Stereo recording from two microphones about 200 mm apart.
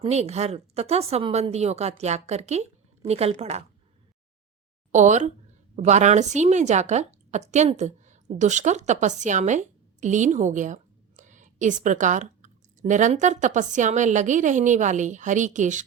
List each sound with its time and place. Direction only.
0.0 s a woman's voice: 35° right (ahead or behind)
4.9 s a woman's voice: 35° right (ahead or behind)